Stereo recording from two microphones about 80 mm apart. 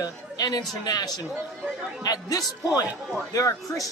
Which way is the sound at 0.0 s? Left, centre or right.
Left.